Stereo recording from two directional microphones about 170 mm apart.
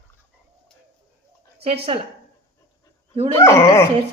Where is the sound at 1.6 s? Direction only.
35° right (ahead or behind).